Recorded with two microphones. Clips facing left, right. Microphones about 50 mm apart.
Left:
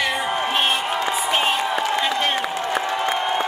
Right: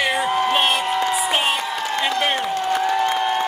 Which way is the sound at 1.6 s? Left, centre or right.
Left.